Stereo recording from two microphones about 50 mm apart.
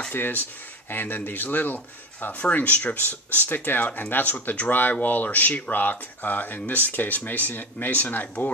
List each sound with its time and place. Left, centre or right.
0.1 s speech: left